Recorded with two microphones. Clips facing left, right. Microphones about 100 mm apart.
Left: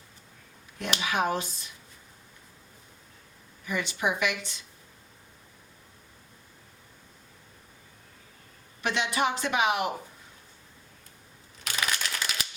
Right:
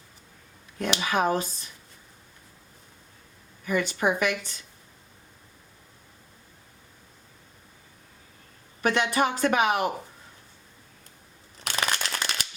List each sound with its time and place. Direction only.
0.8 s speech: 40° right (ahead or behind)
3.7 s speech: 45° right (ahead or behind)
8.8 s speech: 45° right (ahead or behind)
11.8 s a sound: 50° right (ahead or behind)